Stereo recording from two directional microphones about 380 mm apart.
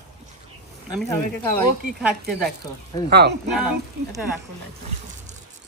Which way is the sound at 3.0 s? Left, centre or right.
Right.